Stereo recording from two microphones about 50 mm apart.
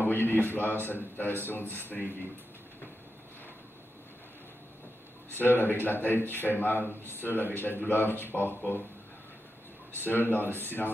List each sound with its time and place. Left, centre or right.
0.1 s a man's voice: left
5.4 s speech: left
10.0 s speech: left